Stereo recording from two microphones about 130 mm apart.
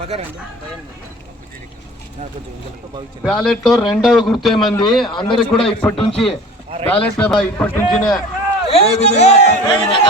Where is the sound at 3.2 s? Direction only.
Centre (ahead or behind).